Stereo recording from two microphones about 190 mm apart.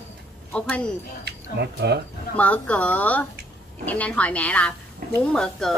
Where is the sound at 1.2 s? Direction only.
60° right (ahead or behind).